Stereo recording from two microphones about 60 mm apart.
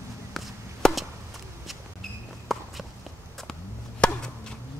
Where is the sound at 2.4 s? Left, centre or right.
Centre.